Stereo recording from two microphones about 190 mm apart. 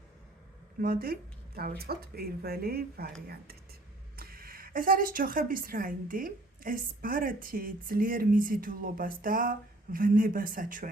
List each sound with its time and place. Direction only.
0.8 s speech: 50° right (ahead or behind)